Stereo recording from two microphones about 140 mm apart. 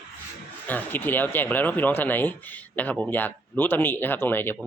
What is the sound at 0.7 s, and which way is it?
Speech, 15° left (ahead or behind).